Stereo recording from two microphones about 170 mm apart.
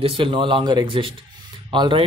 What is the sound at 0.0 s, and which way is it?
Speech, 30° right (ahead or behind).